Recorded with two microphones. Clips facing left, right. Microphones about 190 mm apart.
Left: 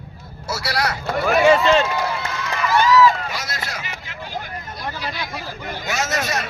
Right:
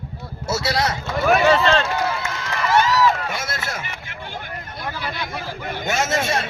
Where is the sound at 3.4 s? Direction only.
50° right (ahead or behind).